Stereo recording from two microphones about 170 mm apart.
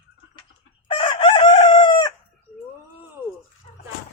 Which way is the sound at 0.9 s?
30° left (ahead or behind).